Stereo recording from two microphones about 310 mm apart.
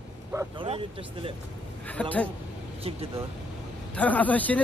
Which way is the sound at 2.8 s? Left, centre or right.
Centre.